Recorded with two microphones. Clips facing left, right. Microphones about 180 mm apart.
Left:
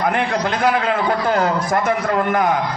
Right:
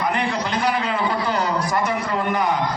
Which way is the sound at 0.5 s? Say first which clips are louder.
Left 5 dB; 55° left (ahead or behind).